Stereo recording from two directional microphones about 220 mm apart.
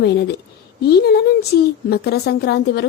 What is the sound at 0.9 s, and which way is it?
A woman's voice, 45° left (ahead or behind).